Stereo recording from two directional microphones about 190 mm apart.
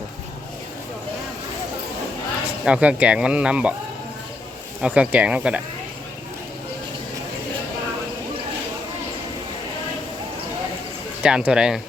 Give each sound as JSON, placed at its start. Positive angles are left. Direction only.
{"t": 2.6, "sound": "speech", "side_deg": -5}
{"t": 4.8, "sound": "speech", "side_deg": -5}
{"t": 11.2, "sound": "speech", "side_deg": -5}